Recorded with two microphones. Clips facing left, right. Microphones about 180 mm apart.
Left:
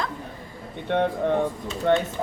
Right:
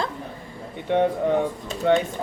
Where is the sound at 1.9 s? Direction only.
10° right (ahead or behind).